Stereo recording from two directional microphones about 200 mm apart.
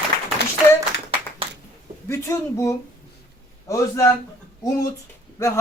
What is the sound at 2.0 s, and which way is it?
Speech, 15° left (ahead or behind).